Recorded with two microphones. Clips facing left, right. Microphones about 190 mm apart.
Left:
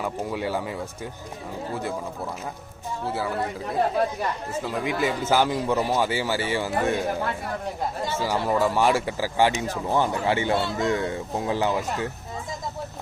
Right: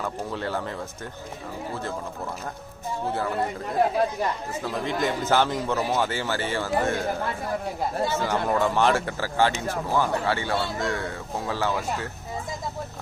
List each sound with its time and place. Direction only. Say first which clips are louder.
0.0 s speech: left 2 dB; 10° left (ahead or behind)
1.7 s speech: left 3 dB; 10° left (ahead or behind)
3.1 s speech: even; 5° left (ahead or behind)
4.6 s speech: left 1 dB; 10° left (ahead or behind)
8.2 s speech: left 3 dB; 5° left (ahead or behind)